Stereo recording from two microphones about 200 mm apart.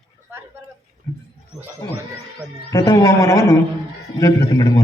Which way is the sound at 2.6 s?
15° left (ahead or behind).